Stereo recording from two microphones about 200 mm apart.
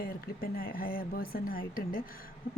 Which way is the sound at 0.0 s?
50° left (ahead or behind).